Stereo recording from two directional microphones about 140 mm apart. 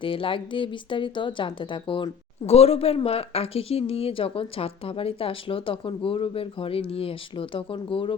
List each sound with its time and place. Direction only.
0.0 s speech: 40° left (ahead or behind)